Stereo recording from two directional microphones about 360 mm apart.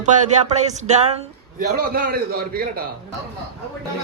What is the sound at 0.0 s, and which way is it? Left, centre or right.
A woman's voice, centre.